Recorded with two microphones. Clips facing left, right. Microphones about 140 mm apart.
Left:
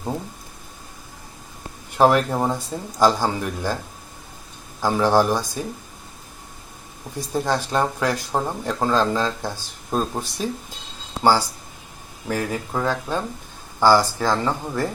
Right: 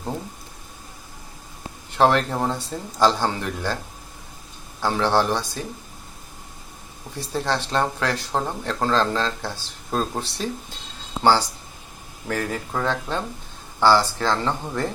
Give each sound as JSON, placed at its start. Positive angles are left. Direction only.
{"t": 2.0, "sound": "speech", "side_deg": 10}
{"t": 4.8, "sound": "speech", "side_deg": 10}
{"t": 7.2, "sound": "speech", "side_deg": 10}